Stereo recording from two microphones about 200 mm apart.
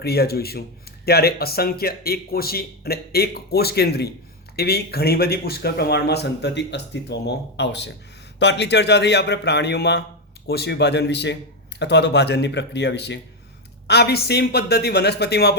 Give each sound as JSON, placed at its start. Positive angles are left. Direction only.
{"t": 0.0, "sound": "speech", "side_deg": 50}